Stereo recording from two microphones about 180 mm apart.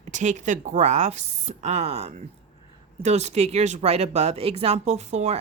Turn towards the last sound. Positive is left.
turn(degrees=-40)  # may be behind; listen again after turning